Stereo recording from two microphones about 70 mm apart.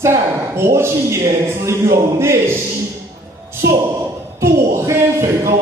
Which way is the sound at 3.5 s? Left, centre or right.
Right.